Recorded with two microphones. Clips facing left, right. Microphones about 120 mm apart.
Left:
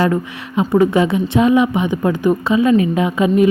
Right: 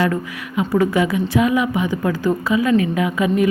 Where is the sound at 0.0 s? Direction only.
30° left (ahead or behind).